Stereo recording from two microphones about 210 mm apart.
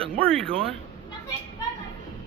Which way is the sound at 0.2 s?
5° left (ahead or behind).